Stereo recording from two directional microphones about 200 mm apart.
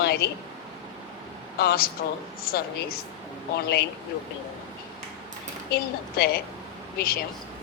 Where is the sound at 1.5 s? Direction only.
50° left (ahead or behind).